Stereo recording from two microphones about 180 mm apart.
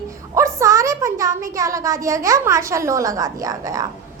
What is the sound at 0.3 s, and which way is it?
A child's voice, 15° right (ahead or behind).